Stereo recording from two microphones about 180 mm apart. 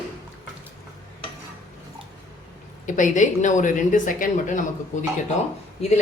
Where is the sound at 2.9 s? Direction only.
45° left (ahead or behind).